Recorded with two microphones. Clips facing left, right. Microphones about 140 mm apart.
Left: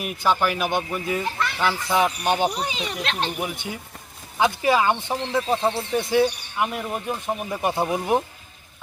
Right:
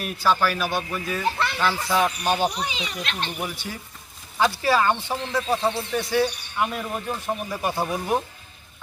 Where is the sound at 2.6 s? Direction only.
40° left (ahead or behind).